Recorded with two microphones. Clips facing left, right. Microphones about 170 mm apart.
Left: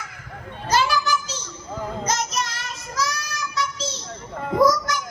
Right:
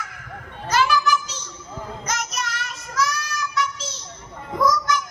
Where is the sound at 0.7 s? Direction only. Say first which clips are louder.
Right 1 dB; 35° left (ahead or behind).